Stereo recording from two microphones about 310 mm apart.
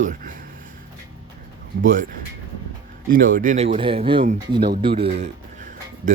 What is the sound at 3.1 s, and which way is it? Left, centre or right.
Speech, right.